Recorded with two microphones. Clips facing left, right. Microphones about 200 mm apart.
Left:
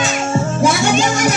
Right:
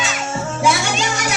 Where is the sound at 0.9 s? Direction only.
50° left (ahead or behind).